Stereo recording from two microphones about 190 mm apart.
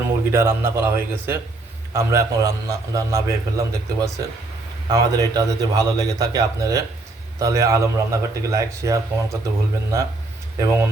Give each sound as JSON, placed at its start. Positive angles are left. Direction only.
{"t": 0.3, "sound": "a man's voice", "side_deg": -10}
{"t": 10.6, "sound": "a man's voice", "side_deg": -15}